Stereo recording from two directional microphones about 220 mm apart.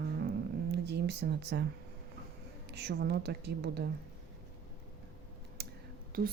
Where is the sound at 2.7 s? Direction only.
50° right (ahead or behind).